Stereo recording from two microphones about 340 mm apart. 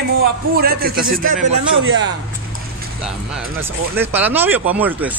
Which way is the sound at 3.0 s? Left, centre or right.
Centre.